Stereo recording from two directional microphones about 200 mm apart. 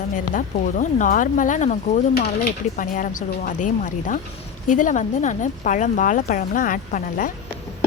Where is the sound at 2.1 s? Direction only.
50° left (ahead or behind).